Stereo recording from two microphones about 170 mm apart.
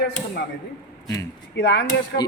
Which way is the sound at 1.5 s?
90° left.